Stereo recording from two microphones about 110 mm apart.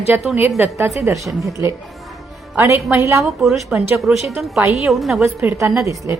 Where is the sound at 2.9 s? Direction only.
25° right (ahead or behind).